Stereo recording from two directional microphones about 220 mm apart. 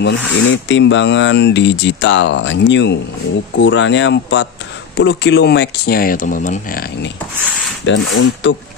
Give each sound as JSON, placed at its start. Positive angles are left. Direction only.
{"t": 0.3, "sound": "speech", "side_deg": 60}
{"t": 7.8, "sound": "speech", "side_deg": 60}